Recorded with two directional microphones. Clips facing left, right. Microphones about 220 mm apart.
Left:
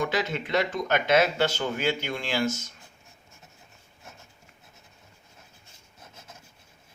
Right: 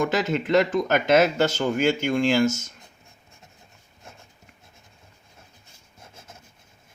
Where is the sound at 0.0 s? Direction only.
45° right (ahead or behind).